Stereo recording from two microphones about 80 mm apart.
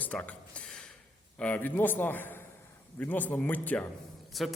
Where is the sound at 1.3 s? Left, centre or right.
Centre.